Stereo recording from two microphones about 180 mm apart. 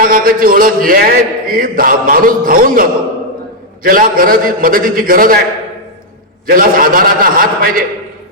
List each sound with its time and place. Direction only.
0.0 s a man's voice: 55° right (ahead or behind)
3.8 s a man's voice: 55° right (ahead or behind)
6.5 s a man's voice: 50° right (ahead or behind)